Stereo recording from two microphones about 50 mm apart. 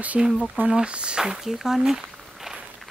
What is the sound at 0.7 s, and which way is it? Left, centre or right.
Speech, centre.